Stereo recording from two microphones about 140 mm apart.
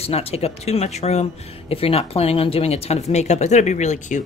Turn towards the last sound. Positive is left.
turn(degrees=60)  # may be behind; listen again after turning